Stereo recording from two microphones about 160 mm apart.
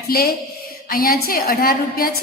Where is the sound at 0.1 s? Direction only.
75° left (ahead or behind).